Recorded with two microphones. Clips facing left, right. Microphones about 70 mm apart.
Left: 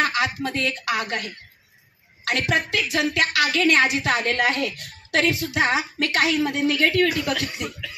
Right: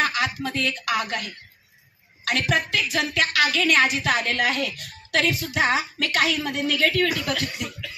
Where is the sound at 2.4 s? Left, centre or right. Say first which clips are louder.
Left 1 dB; left.